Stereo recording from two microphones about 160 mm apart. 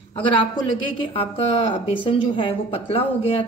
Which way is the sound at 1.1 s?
40° left (ahead or behind).